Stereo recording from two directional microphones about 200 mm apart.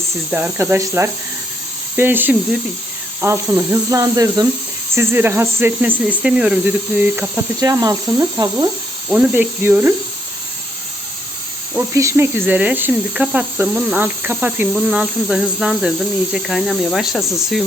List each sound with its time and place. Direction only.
0.3 s speech: 5° right (ahead or behind)
11.7 s speech: 15° right (ahead or behind)